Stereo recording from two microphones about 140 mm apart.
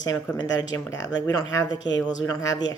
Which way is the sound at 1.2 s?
25° left (ahead or behind).